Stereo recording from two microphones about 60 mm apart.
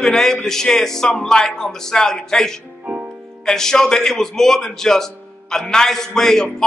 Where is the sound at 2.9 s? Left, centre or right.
Right.